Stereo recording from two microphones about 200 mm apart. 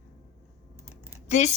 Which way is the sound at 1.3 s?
35° left (ahead or behind).